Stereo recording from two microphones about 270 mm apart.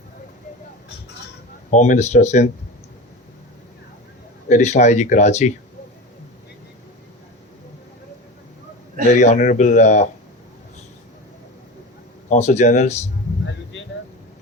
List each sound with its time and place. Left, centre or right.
1.7 s speech: left
4.4 s speech: left
9.1 s speech: left
12.3 s speech: left